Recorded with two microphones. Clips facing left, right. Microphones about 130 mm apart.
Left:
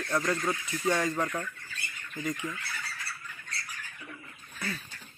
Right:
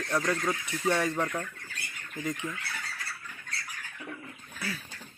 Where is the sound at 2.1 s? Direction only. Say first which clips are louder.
Even; 20° right (ahead or behind).